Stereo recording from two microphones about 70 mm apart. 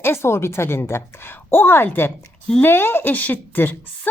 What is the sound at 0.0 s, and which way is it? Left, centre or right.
A woman's voice, left.